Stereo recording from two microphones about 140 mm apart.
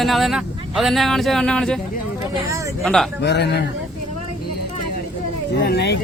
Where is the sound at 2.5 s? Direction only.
20° right (ahead or behind).